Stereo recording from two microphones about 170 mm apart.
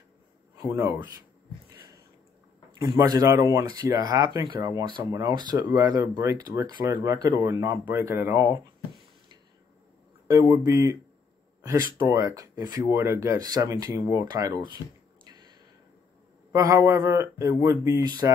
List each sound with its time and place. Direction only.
0.6 s speech: 15° right (ahead or behind)
2.8 s speech: 20° right (ahead or behind)
10.2 s speech: 20° right (ahead or behind)
16.5 s speech: 20° right (ahead or behind)